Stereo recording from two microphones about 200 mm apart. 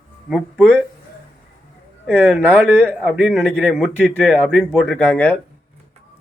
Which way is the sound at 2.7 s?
10° right (ahead or behind).